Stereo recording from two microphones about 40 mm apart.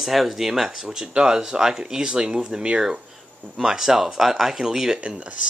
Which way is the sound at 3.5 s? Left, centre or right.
Centre.